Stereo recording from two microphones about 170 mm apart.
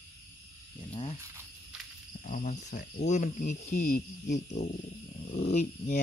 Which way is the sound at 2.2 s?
50° left (ahead or behind).